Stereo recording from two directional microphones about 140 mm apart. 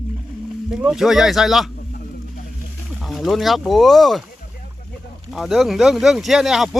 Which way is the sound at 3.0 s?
Centre (ahead or behind).